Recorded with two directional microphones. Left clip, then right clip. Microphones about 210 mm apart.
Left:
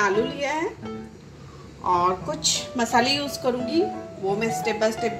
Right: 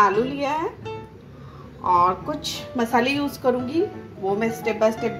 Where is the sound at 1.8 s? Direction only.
5° right (ahead or behind).